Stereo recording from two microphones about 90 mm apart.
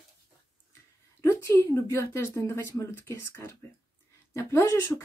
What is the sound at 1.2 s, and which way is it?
A woman's voice, 30° left (ahead or behind).